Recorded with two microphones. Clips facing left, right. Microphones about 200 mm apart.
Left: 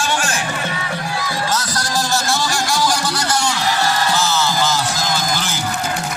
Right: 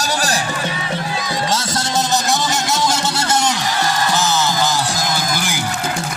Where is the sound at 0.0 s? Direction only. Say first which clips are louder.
Right 1 dB; 40° right (ahead or behind).